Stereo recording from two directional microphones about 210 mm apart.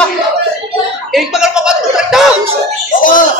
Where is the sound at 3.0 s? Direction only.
40° left (ahead or behind).